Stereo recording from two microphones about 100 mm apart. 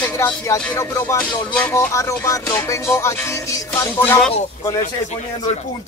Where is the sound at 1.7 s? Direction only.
30° left (ahead or behind).